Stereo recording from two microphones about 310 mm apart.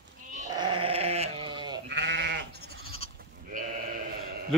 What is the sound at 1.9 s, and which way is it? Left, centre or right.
Sheep, right.